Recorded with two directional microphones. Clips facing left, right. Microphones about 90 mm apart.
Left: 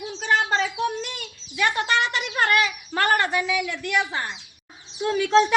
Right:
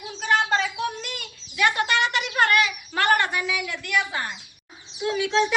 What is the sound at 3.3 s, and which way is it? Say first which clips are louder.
A woman's voice: left 3 dB; 25° left (ahead or behind).